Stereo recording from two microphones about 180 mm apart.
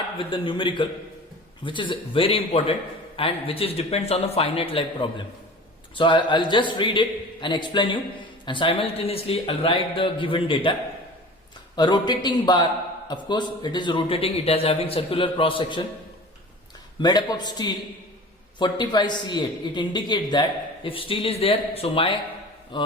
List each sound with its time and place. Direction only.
0.2 s a man's voice: 30° left (ahead or behind)
11.8 s a man's voice: 25° left (ahead or behind)
17.0 s a man's voice: 20° left (ahead or behind)